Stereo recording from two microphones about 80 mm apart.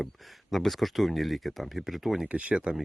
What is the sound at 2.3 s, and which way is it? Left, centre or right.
Speech, centre.